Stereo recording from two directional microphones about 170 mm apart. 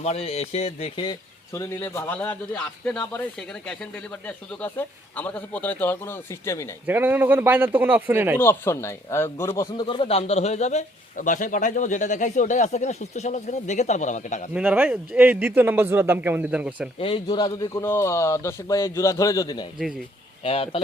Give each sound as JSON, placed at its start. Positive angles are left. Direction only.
{"t": 0.0, "sound": "speech", "side_deg": 40}
{"t": 1.5, "sound": "a man's voice", "side_deg": 15}
{"t": 4.3, "sound": "a man's voice", "side_deg": 10}
{"t": 6.8, "sound": "a man's voice", "side_deg": -10}
{"t": 8.4, "sound": "a man's voice", "side_deg": 15}
{"t": 14.5, "sound": "a man's voice", "side_deg": -10}
{"t": 17.0, "sound": "speech", "side_deg": 30}
{"t": 20.4, "sound": "speech", "side_deg": 35}